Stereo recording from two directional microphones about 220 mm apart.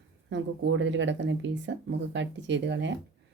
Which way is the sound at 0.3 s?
55° right (ahead or behind).